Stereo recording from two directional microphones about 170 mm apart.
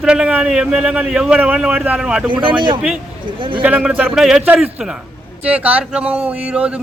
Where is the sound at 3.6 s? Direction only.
5° right (ahead or behind).